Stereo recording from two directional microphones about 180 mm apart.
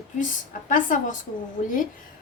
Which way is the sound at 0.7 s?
45° left (ahead or behind).